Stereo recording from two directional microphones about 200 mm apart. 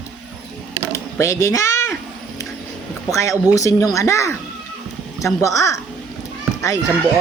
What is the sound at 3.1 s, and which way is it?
A woman's voice, 15° left (ahead or behind).